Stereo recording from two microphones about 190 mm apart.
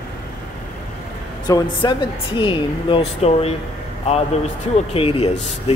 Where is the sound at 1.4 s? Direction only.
25° left (ahead or behind).